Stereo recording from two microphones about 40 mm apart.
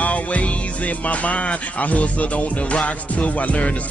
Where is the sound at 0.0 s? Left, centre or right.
Left.